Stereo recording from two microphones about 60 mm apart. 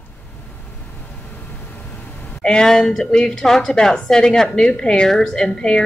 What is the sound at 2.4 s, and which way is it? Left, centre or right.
A woman's voice, centre.